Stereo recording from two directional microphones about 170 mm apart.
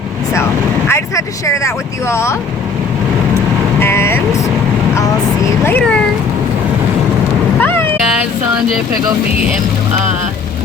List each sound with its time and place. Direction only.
0.9 s speech: 15° left (ahead or behind)
3.8 s vehicle: 15° left (ahead or behind)
5.6 s speech: 10° left (ahead or behind)
7.6 s a sound: 15° left (ahead or behind)